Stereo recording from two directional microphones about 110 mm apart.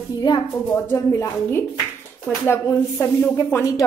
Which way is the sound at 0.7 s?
20° left (ahead or behind).